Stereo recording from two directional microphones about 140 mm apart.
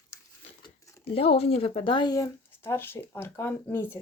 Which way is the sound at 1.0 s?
45° left (ahead or behind).